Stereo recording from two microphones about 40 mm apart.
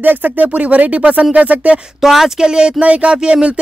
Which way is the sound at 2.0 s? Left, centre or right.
Centre.